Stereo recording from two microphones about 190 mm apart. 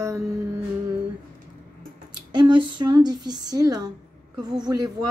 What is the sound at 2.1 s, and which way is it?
Speech, 25° right (ahead or behind).